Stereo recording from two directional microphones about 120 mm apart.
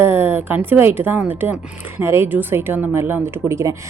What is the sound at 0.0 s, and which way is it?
Speech, 20° right (ahead or behind).